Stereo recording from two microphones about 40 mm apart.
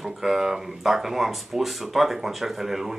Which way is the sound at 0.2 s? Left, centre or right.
Centre.